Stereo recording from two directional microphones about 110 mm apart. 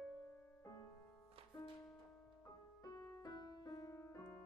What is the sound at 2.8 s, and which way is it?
Music, 35° left (ahead or behind).